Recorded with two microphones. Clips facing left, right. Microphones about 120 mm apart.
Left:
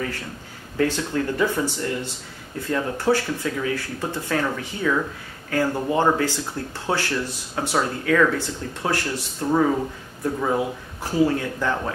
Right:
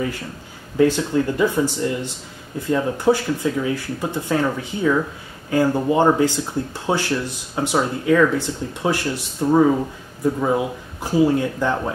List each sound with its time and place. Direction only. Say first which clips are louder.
0.7 s speech: right 5 dB; 15° right (ahead or behind)